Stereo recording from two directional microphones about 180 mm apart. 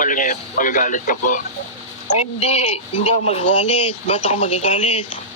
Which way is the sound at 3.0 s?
35° left (ahead or behind).